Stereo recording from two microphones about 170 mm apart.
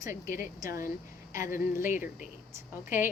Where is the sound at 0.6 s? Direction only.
20° right (ahead or behind).